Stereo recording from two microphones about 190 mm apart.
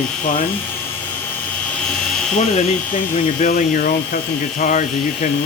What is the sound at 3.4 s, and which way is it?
Speech, 45° left (ahead or behind).